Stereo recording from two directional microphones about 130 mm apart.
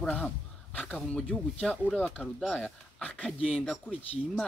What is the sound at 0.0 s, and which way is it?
Speech, 5° left (ahead or behind).